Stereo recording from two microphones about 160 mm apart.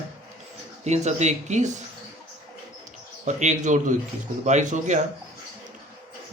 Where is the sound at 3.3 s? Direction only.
50° right (ahead or behind).